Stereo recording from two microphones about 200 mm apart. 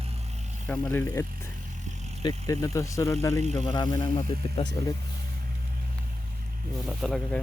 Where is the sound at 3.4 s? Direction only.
35° right (ahead or behind).